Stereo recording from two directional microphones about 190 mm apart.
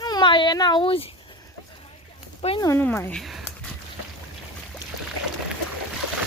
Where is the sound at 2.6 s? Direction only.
15° left (ahead or behind).